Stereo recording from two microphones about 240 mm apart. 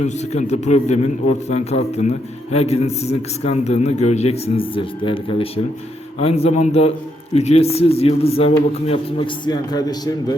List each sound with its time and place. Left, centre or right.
0.0 s a man's voice: left